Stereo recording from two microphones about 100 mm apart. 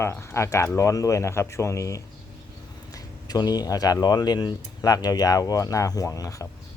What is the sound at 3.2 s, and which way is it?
Speech, 40° left (ahead or behind).